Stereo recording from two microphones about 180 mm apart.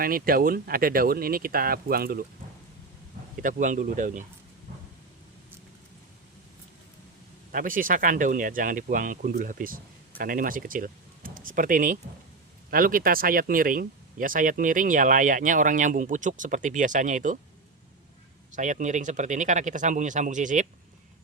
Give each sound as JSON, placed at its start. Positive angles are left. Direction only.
{"t": 0.0, "sound": "speech", "side_deg": -55}
{"t": 3.4, "sound": "speech", "side_deg": -45}
{"t": 7.5, "sound": "speech", "side_deg": -50}
{"t": 18.5, "sound": "speech", "side_deg": -45}